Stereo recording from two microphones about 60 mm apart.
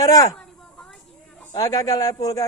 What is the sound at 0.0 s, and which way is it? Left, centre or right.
Speech, left.